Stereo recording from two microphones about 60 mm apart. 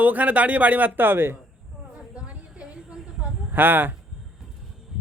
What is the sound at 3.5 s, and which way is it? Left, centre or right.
Speech, right.